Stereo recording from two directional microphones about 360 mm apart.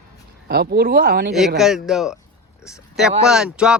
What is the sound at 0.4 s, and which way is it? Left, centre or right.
Speech, right.